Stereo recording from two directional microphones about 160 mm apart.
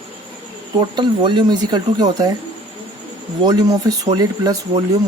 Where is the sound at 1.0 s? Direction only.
30° right (ahead or behind).